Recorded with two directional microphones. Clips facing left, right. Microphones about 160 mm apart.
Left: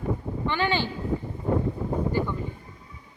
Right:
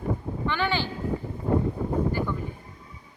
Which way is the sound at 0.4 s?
15° left (ahead or behind).